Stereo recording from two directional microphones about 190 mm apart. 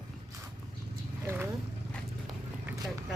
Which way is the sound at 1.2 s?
10° right (ahead or behind).